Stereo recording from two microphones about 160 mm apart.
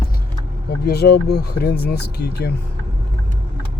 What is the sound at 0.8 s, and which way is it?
Speech, 80° left.